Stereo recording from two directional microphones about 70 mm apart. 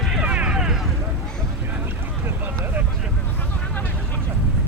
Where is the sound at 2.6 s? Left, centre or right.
Right.